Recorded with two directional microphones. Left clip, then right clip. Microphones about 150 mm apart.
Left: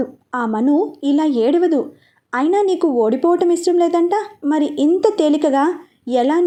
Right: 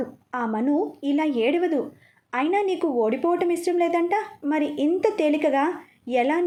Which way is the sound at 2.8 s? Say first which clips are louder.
Left 7 dB; 30° left (ahead or behind).